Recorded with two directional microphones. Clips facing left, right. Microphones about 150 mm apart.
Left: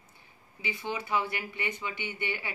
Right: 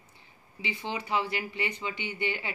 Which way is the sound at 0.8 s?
25° right (ahead or behind).